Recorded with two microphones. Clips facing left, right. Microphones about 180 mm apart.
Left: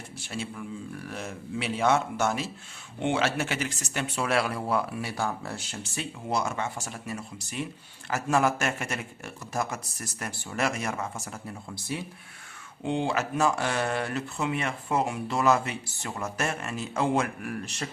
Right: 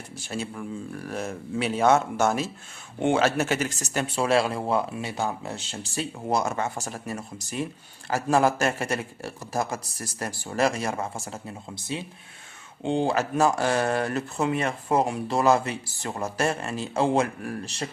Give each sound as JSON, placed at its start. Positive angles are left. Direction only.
{"t": 0.3, "sound": "a man's voice", "side_deg": -45}
{"t": 4.2, "sound": "speech", "side_deg": -30}
{"t": 12.8, "sound": "speech", "side_deg": -35}